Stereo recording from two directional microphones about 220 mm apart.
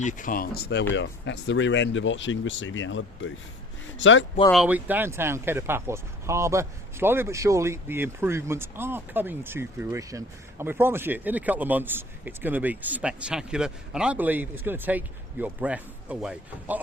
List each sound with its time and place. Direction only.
0.0 s speech: 35° left (ahead or behind); by 4.3 s 60° left (ahead or behind)
4.5 s speech: 5° right (ahead or behind)